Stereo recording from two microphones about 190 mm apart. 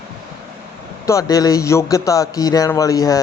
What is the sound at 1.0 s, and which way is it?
A man's voice, 15° left (ahead or behind).